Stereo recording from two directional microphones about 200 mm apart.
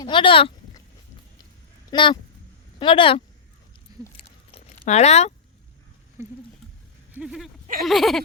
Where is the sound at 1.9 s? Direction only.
25° left (ahead or behind).